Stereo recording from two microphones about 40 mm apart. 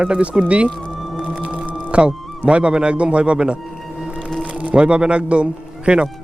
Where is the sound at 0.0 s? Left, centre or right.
Right.